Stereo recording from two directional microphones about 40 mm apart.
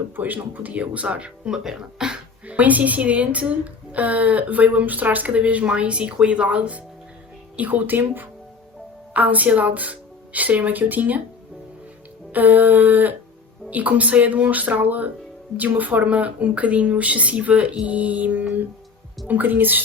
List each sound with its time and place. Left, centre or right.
0.2 s speech: right
1.5 s speech: centre
2.5 s a woman's voice: right
7.5 s speech: right
9.1 s a woman's voice: right
12.3 s speech: right
16.0 s a woman's voice: right